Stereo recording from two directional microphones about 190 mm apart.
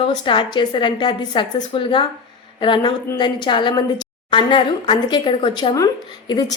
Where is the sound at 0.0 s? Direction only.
25° left (ahead or behind).